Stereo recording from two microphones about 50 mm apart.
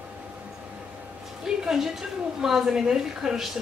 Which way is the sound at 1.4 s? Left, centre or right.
Centre.